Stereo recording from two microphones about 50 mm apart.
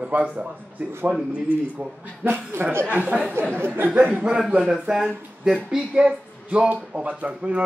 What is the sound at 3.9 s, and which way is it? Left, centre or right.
Speech, right.